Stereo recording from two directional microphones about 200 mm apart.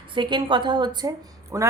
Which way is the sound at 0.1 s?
25° right (ahead or behind).